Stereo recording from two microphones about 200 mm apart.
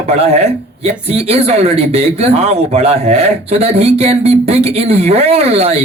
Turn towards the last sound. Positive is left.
turn(degrees=-30)  # may be behind; listen again after turning